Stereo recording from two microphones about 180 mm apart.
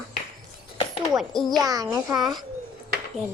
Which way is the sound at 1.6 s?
20° right (ahead or behind).